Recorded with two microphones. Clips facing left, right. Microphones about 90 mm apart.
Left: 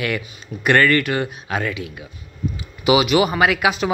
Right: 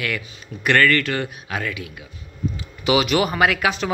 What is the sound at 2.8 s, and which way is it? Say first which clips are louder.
Speech: left 3 dB; 10° left (ahead or behind).